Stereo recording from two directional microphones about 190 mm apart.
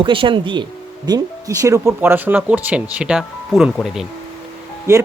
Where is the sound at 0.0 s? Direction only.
25° right (ahead or behind); by 4.0 s centre (ahead or behind).